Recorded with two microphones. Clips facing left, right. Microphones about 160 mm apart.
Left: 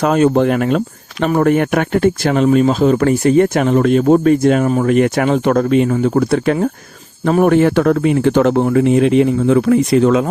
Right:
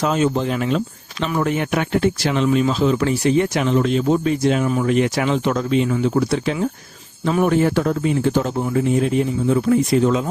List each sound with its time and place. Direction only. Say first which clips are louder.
0.0 s speech: left 7 dB; 55° left (ahead or behind)